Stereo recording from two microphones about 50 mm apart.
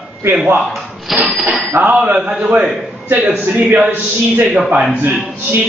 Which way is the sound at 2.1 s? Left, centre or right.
Right.